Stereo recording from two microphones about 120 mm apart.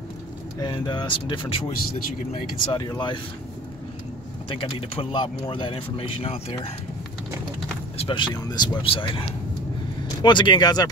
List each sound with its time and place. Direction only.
0.6 s speech: 35° left (ahead or behind)
2.6 s speech: 35° left (ahead or behind)
4.5 s speech: 50° left (ahead or behind)
8.1 s speech: 40° left (ahead or behind)
10.2 s speech: 40° left (ahead or behind)